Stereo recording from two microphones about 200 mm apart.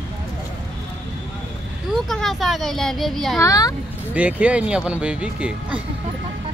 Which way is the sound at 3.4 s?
15° left (ahead or behind).